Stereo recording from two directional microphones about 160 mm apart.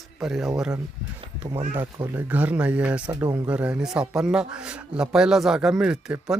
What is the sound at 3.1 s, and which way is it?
Speech, 20° right (ahead or behind).